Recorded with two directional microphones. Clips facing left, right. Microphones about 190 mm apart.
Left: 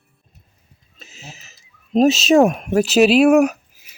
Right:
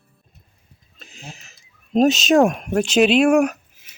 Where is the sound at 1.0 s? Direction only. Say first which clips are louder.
Right 1 dB; 5° left (ahead or behind).